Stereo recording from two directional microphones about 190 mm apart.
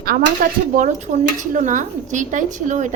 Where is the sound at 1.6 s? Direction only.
40° right (ahead or behind).